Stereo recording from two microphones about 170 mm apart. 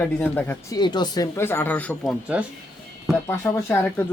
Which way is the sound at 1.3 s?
15° left (ahead or behind).